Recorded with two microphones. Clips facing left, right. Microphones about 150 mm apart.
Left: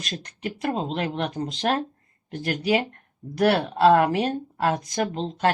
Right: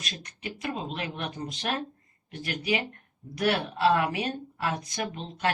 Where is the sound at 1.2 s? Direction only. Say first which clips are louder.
Left 8 dB; 40° left (ahead or behind).